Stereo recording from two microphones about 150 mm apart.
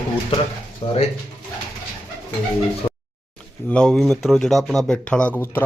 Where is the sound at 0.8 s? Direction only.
40° left (ahead or behind).